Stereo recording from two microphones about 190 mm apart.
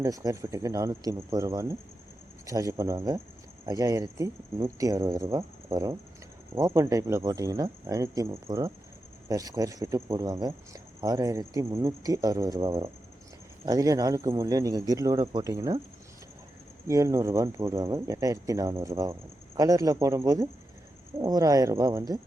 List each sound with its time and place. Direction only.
0.0 s a man's voice: 15° right (ahead or behind)
8.4 s a man's voice: 25° right (ahead or behind)
16.8 s speech: 15° right (ahead or behind)